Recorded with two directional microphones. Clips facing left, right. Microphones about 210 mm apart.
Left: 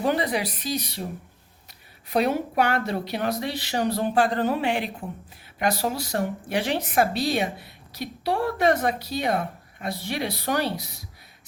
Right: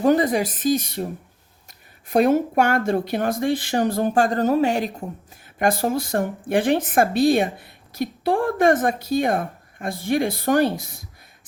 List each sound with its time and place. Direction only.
0.0 s speech: 45° right (ahead or behind)